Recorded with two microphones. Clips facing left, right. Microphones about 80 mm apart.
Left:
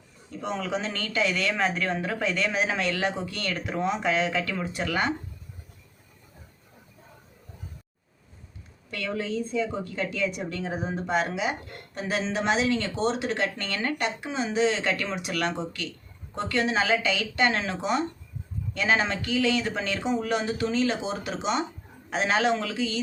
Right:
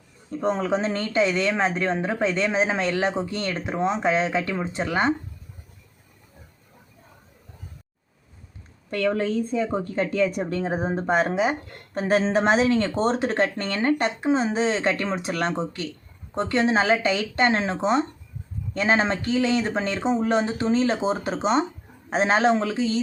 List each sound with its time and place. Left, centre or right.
0.3 s speech: right
8.9 s speech: right